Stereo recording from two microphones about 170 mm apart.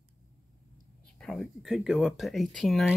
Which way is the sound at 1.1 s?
5° left (ahead or behind).